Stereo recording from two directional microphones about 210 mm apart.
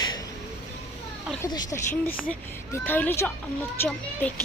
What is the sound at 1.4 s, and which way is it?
A woman's voice, 15° left (ahead or behind).